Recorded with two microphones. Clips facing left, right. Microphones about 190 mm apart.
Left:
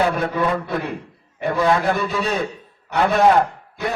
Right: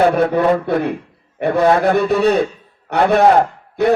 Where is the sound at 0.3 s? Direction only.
60° right (ahead or behind).